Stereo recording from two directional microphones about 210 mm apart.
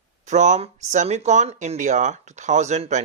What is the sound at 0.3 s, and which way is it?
Speech, 35° right (ahead or behind).